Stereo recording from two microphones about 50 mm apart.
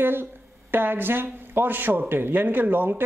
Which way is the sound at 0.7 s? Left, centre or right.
Right.